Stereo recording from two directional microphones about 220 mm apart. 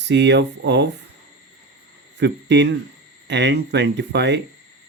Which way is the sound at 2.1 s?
50° right (ahead or behind).